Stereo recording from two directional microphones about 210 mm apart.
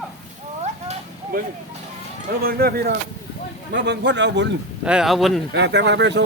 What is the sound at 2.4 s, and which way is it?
Speech, 45° right (ahead or behind).